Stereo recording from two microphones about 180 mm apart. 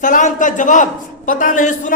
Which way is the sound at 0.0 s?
45° left (ahead or behind).